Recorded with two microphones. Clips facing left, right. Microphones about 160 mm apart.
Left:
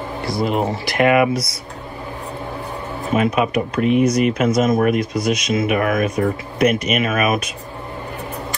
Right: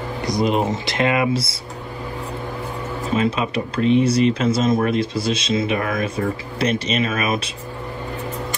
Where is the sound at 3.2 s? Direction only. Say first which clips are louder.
Left 4 dB; 30° right (ahead or behind).